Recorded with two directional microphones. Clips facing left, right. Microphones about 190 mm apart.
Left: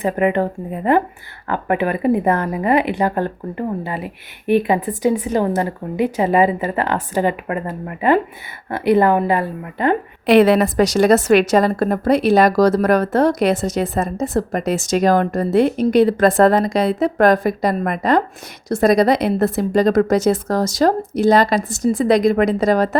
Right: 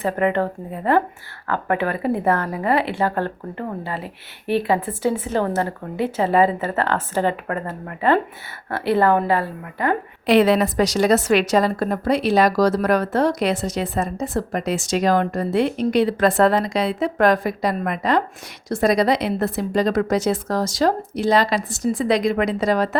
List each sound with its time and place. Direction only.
0.0 s speech: 15° left (ahead or behind)
10.2 s a woman's voice: 55° left (ahead or behind)